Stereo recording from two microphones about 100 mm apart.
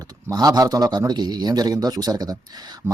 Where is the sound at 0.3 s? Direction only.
40° right (ahead or behind).